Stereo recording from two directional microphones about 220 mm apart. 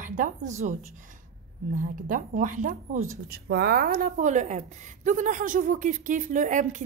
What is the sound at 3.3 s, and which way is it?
A woman's voice, 45° right (ahead or behind).